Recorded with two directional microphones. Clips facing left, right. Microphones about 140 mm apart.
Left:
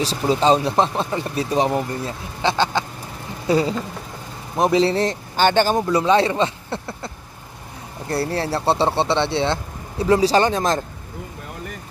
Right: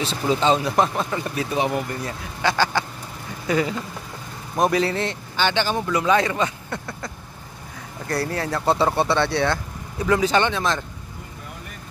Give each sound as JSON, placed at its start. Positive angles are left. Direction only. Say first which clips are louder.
{"t": 0.0, "sound": "speech", "louder": "left 3 dB", "side_deg": 35}
{"t": 8.1, "sound": "speech", "louder": "left 2 dB", "side_deg": 30}